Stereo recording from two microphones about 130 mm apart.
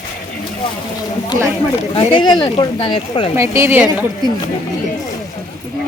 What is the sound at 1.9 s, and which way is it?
Speech, 40° left (ahead or behind).